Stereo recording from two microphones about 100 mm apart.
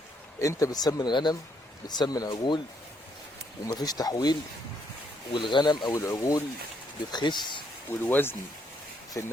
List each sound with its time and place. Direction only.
0.3 s speech: 35° left (ahead or behind)
2.3 s speech: 50° left (ahead or behind)
3.7 s speech: 40° left (ahead or behind)
5.3 s speech: 55° left (ahead or behind)
5.9 s speech: 30° left (ahead or behind)
7.1 s speech: 50° left (ahead or behind)
7.9 s speech: 20° left (ahead or behind)